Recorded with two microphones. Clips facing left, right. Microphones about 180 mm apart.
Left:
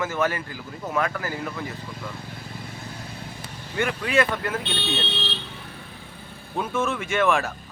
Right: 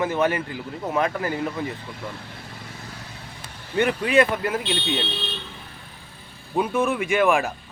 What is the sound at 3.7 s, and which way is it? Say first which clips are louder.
Speech: right 4 dB; 20° right (ahead or behind).